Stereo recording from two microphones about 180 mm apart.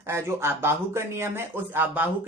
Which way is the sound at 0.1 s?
15° right (ahead or behind).